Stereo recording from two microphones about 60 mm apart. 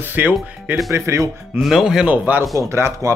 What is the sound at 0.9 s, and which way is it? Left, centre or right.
Speech, right.